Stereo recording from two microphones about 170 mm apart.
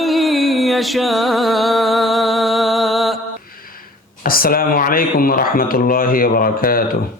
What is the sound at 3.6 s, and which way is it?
Speech, 60° left (ahead or behind).